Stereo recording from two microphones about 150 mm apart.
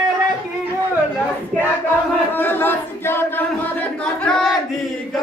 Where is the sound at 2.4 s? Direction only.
15° left (ahead or behind).